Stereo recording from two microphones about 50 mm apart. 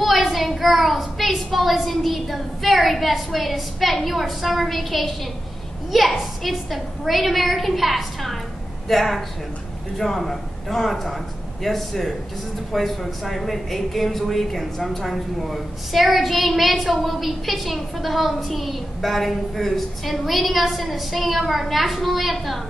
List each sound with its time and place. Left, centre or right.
0.0 s a woman's voice: centre